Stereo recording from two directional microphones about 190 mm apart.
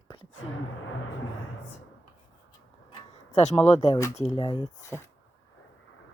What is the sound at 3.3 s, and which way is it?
A woman's voice, 35° left (ahead or behind).